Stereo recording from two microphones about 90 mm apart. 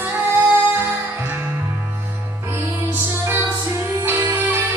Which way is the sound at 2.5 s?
25° right (ahead or behind).